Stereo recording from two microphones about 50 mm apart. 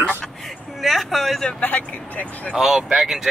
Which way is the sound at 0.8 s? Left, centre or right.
Centre.